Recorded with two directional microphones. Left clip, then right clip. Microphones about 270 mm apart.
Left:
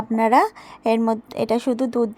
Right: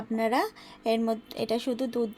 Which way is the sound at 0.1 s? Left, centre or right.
Left.